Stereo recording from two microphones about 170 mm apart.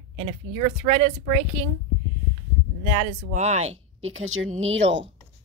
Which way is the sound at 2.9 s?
45° right (ahead or behind).